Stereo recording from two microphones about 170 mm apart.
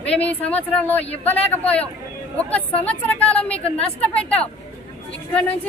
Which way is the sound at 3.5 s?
35° left (ahead or behind).